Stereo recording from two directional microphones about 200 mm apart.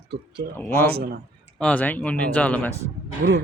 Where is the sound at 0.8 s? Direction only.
50° right (ahead or behind).